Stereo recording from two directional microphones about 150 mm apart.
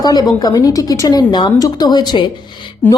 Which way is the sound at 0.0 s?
25° left (ahead or behind).